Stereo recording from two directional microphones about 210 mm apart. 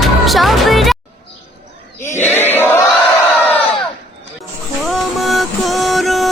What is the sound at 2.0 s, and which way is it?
Chant, 10° left (ahead or behind).